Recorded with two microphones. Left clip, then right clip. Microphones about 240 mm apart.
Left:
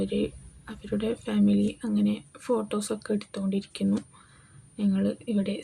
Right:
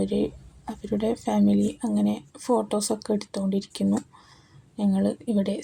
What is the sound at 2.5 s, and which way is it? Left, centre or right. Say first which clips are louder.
Speech: right 4 dB; centre.